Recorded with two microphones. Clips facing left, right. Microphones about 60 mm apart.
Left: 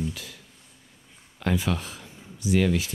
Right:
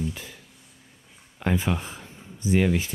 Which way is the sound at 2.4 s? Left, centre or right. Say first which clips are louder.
Right 1 dB; right.